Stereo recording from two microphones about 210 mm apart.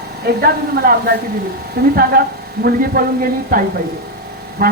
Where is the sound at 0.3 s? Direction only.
50° right (ahead or behind).